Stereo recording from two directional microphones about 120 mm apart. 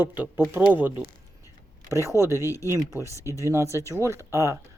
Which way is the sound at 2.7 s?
25° right (ahead or behind).